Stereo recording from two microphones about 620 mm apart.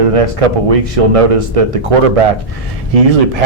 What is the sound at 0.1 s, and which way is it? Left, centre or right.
A man's voice, right.